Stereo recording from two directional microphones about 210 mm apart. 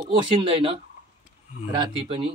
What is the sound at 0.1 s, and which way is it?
Speech, 25° right (ahead or behind).